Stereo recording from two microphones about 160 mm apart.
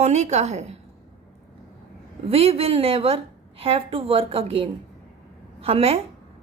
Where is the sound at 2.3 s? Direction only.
40° right (ahead or behind).